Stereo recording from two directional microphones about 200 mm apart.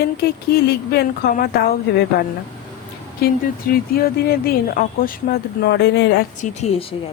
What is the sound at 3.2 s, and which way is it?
Speech, 50° left (ahead or behind).